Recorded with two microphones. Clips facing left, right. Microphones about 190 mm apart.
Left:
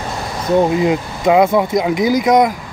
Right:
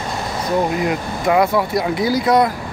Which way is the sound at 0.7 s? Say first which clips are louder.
Left 4 dB; 20° left (ahead or behind).